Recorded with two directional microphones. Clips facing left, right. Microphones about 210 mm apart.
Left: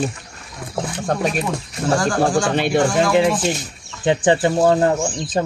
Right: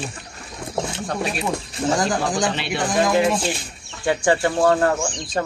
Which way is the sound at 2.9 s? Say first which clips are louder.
Left 2 dB; 20° right (ahead or behind).